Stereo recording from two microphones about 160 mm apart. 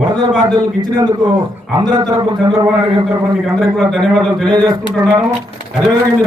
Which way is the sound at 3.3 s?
Centre (ahead or behind).